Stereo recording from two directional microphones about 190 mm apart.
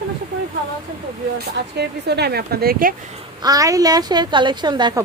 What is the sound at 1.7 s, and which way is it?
A woman's voice, 60° right (ahead or behind).